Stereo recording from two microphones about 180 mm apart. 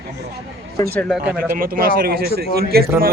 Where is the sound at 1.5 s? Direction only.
55° right (ahead or behind).